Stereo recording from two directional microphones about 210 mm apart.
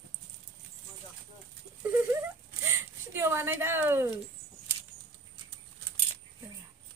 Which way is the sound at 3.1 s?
10° right (ahead or behind).